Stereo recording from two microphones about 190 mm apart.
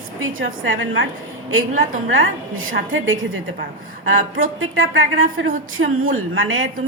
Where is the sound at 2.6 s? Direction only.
90° right.